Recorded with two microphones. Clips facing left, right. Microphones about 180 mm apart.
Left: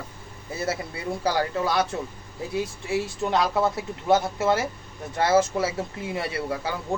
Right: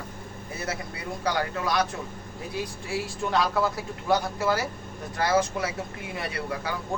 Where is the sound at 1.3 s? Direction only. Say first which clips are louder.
Left 2 dB; 30° left (ahead or behind).